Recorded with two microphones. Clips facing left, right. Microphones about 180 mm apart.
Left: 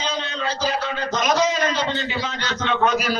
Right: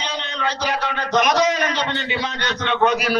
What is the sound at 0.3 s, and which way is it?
A man's voice, 70° right (ahead or behind).